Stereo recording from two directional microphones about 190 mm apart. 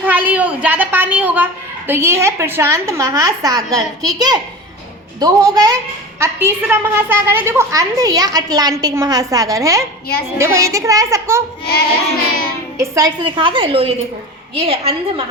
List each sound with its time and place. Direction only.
0.0 s a sound: 10° right (ahead or behind)
1.9 s a woman's voice: 15° right (ahead or behind)
11.6 s child singing: 55° left (ahead or behind)
12.8 s a woman's voice: 15° right (ahead or behind)